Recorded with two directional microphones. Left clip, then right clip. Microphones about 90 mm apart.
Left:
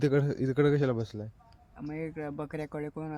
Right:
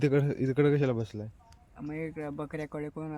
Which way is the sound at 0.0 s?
5° right (ahead or behind).